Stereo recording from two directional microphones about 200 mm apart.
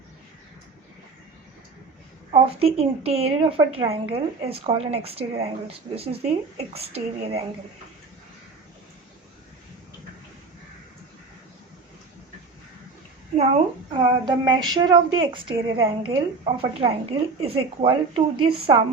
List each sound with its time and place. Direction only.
2.3 s a woman's voice: 30° right (ahead or behind)
13.3 s a child's voice: 35° right (ahead or behind)
14.0 s a woman's voice: 20° right (ahead or behind)